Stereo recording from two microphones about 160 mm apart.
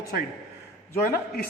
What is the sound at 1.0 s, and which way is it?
Speech, 65° left (ahead or behind).